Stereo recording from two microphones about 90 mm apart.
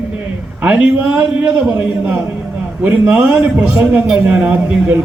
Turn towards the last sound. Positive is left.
turn(degrees=-20)  # may be behind; listen again after turning